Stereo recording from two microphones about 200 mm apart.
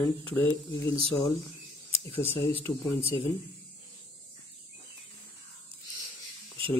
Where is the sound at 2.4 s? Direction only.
25° left (ahead or behind).